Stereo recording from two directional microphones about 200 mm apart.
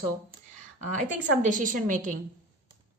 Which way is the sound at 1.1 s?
40° right (ahead or behind).